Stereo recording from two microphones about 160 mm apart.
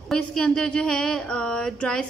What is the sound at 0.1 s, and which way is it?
Speech, 5° left (ahead or behind).